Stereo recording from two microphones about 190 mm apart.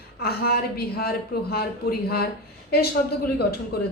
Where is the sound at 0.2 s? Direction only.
55° left (ahead or behind).